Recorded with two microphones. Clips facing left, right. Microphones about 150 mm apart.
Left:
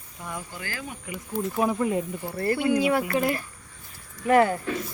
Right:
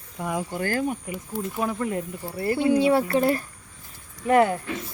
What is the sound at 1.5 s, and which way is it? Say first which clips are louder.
Speech: left 3 dB; 10° left (ahead or behind).